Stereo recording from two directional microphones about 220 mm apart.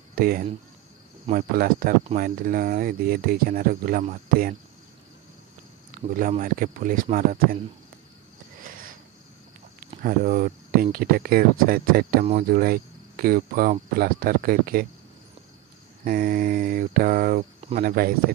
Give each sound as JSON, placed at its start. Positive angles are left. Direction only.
{"t": 0.1, "sound": "speech", "side_deg": -40}
{"t": 6.1, "sound": "speech", "side_deg": -40}
{"t": 8.6, "sound": "cricket", "side_deg": -40}
{"t": 10.0, "sound": "speech", "side_deg": -40}
{"t": 16.0, "sound": "speech", "side_deg": -35}
{"t": 17.6, "sound": "cricket", "side_deg": -25}
{"t": 17.8, "sound": "speech", "side_deg": -40}